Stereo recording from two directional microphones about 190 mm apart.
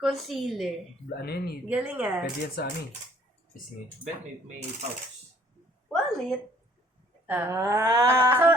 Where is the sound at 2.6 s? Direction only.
55° left (ahead or behind).